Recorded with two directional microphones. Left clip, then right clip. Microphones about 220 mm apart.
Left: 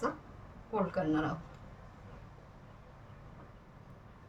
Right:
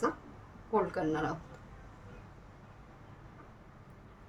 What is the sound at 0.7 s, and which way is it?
Speech, 30° right (ahead or behind).